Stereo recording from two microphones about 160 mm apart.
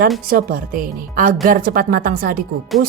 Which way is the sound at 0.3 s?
60° right (ahead or behind).